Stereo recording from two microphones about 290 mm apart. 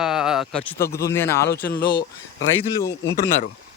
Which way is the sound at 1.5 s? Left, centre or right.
Left.